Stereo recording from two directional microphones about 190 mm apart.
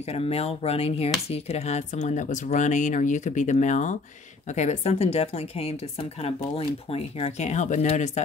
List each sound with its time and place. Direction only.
0.0 s speech: 35° left (ahead or behind)